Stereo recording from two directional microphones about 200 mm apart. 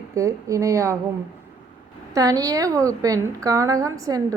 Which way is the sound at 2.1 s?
15° right (ahead or behind).